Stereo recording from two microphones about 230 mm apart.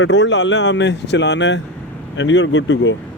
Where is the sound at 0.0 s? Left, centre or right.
Left.